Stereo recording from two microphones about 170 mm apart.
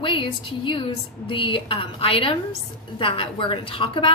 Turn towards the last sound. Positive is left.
turn(degrees=30)  # may be behind; listen again after turning